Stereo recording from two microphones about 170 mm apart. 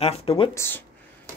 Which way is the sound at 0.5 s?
15° left (ahead or behind).